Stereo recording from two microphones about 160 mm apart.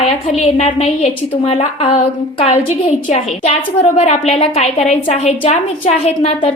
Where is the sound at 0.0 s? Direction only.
40° left (ahead or behind).